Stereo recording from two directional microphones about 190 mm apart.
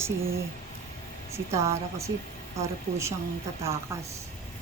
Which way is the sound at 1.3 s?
15° right (ahead or behind).